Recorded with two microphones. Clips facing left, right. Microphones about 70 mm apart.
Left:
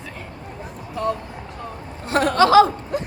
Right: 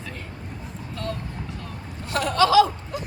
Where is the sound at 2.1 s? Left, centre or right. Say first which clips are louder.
Left 4 dB; left.